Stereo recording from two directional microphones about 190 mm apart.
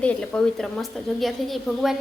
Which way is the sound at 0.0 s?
5° left (ahead or behind).